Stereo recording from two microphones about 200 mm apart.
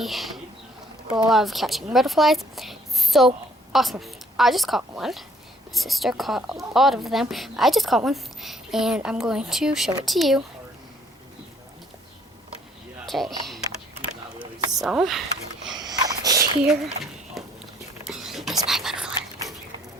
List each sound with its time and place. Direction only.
0.0 s speech: centre (ahead or behind)
13.1 s speech: centre (ahead or behind)
14.8 s speech: 5° right (ahead or behind)
15.8 s a sound: 20° right (ahead or behind)
16.8 s a sound: centre (ahead or behind)
18.0 s whispering: centre (ahead or behind)